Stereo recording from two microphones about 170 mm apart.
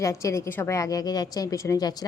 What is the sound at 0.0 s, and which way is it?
A woman's voice, 20° left (ahead or behind).